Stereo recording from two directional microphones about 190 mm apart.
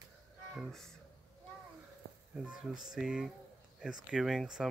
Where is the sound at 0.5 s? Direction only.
Centre (ahead or behind).